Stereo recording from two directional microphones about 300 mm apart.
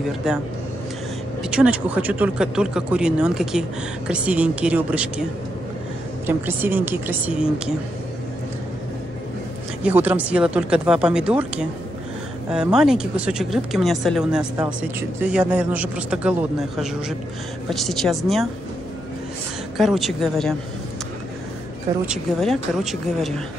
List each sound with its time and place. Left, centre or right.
0.2 s speech: centre
1.5 s speech: centre
6.2 s a woman's voice: centre
9.8 s speech: centre
19.8 s speech: centre
22.0 s speech: centre